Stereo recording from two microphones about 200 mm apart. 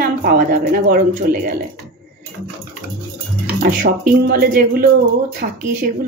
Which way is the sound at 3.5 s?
45° right (ahead or behind).